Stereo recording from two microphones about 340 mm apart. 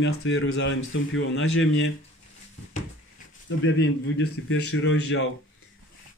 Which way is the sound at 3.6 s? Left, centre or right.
Left.